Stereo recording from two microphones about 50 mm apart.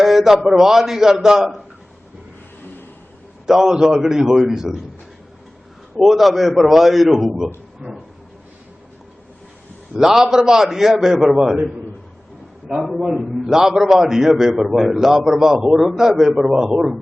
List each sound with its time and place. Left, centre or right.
0.0 s a sound: centre
0.4 s a man's voice: centre
3.4 s a man's voice: centre
6.0 s a man's voice: centre
7.8 s a sound: right
9.9 s a man's voice: centre
12.7 s a man's voice: centre